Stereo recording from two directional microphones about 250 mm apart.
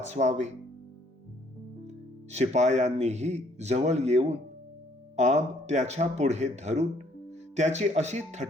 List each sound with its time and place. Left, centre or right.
0.0 s speech: right
1.9 s speech: right